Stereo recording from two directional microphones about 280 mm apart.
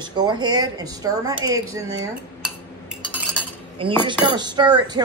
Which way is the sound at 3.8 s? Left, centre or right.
Centre.